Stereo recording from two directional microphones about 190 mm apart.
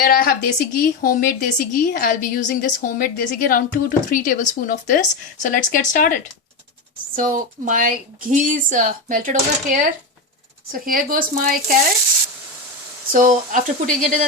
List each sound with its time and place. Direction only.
0.0 s speech: 50° left (ahead or behind)
7.2 s speech: 45° right (ahead or behind)
13.1 s speech: 45° right (ahead or behind)